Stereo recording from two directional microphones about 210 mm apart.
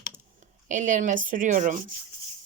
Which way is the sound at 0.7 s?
35° right (ahead or behind).